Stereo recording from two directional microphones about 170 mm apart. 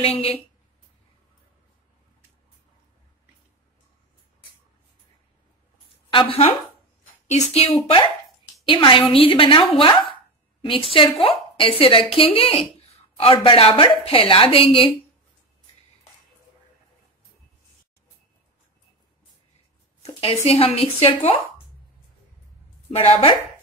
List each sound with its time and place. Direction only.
0.0 s a woman's voice: 35° left (ahead or behind)
6.1 s a woman's voice: 35° left (ahead or behind)
20.1 s a sound: 35° left (ahead or behind)
20.4 s a woman's voice: 35° left (ahead or behind)
22.8 s a woman's voice: 35° left (ahead or behind)